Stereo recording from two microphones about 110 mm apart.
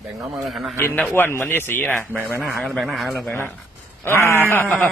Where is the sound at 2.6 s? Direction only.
Centre (ahead or behind).